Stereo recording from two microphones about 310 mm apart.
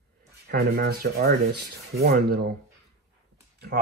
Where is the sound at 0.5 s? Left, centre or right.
Right.